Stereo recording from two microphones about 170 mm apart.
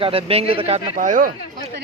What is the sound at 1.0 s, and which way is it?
Speech, 50° right (ahead or behind).